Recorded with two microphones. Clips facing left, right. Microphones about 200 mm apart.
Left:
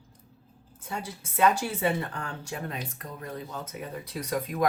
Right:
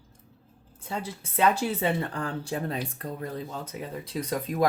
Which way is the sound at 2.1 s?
35° right (ahead or behind).